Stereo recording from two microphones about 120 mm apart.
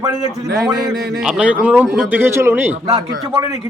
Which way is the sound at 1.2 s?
10° right (ahead or behind).